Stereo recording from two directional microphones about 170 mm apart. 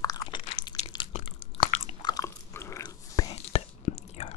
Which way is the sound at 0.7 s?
20° left (ahead or behind).